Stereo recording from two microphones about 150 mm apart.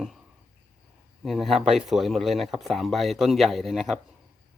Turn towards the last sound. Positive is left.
turn(degrees=0)  # may be behind; listen again after turning